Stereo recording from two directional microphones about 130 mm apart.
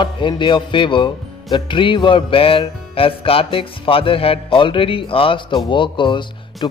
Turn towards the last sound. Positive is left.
turn(degrees=35)  # may be behind; listen again after turning